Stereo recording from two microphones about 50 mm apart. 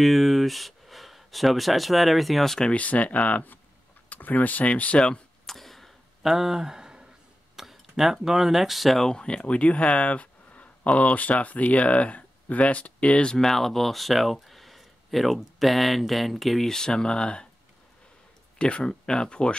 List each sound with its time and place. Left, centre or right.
0.0 s speech: centre
2.6 s speech: left
4.9 s speech: centre
5.5 s a sound: centre
6.3 s speech: centre
9.0 s speech: centre
13.4 s speech: centre
18.6 s speech: left